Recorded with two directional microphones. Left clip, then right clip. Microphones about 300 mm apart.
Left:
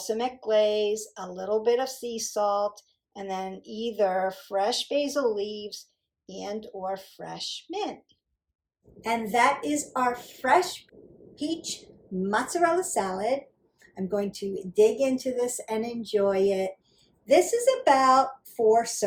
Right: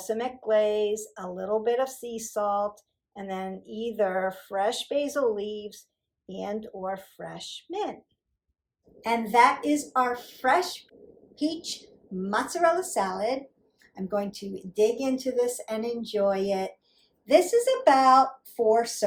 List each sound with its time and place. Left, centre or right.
0.0 s speech: centre
9.0 s a woman's voice: centre